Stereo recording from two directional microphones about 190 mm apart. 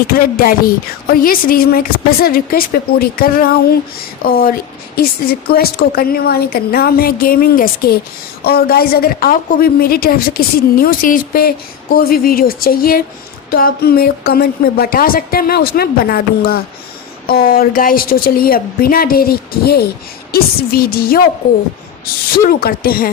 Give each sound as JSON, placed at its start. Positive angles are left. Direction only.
{"t": 0.1, "sound": "a woman's voice", "side_deg": 50}